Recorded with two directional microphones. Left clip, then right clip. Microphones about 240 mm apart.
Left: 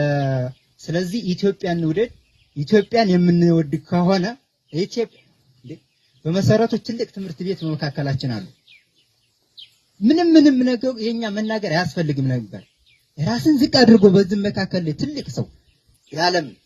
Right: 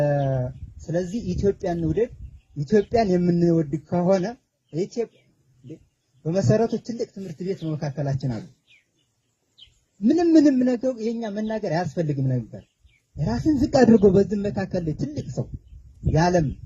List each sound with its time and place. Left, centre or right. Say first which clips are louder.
0.0 s a sound: left 1 dB; left
0.9 s speech: left 3 dB; left
6.2 s speech: left 3 dB; left
10.1 s a man's voice: left 4 dB; left